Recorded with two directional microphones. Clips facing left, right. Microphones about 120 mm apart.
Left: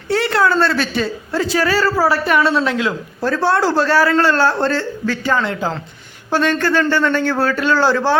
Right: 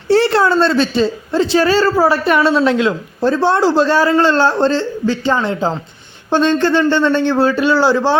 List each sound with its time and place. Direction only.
0.1 s a woman's voice: 30° right (ahead or behind)